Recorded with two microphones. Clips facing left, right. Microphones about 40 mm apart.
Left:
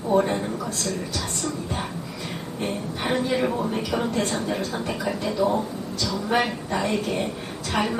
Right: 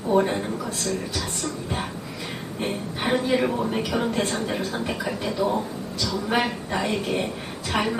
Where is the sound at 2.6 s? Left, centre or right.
Centre.